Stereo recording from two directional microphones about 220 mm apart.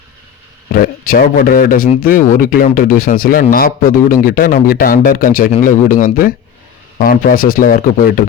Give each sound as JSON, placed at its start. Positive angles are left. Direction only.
{"t": 0.7, "sound": "a man's voice", "side_deg": 40}